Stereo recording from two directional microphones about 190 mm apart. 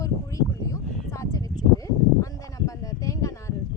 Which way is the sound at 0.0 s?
15° left (ahead or behind).